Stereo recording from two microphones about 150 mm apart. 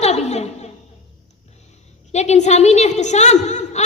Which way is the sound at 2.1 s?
50° left (ahead or behind).